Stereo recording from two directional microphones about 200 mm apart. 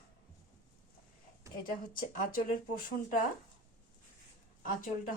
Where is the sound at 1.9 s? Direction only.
45° left (ahead or behind).